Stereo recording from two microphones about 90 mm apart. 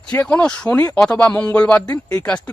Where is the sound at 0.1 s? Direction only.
15° left (ahead or behind).